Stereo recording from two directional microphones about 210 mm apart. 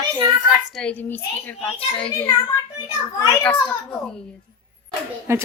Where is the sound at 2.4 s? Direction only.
20° left (ahead or behind).